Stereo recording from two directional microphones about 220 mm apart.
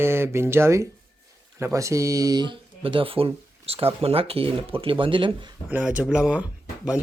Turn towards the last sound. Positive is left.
turn(degrees=-5)  # may be behind; listen again after turning